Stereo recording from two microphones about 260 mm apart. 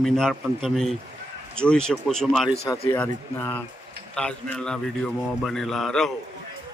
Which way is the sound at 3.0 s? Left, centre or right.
Centre.